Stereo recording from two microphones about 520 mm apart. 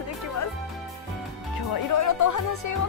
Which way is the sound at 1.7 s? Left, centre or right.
Left.